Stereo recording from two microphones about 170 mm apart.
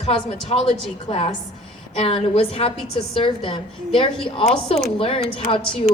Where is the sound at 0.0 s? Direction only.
35° left (ahead or behind).